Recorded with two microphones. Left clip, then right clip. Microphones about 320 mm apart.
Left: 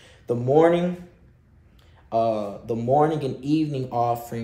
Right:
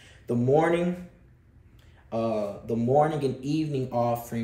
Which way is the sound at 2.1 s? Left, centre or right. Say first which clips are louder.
Left 5 dB; centre.